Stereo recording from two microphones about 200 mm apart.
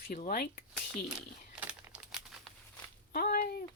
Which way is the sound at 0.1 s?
45° left (ahead or behind).